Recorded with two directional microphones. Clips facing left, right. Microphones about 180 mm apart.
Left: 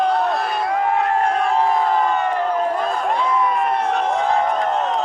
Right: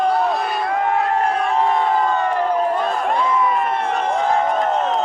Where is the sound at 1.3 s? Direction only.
Centre (ahead or behind).